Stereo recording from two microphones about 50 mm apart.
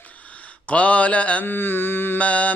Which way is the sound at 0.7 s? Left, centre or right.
Left.